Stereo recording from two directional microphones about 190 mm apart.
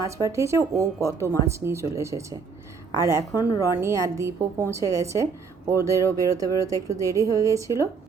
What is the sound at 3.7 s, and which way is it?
Speech, 15° right (ahead or behind).